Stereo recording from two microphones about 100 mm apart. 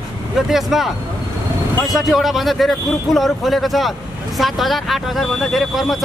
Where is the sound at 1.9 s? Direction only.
Centre (ahead or behind).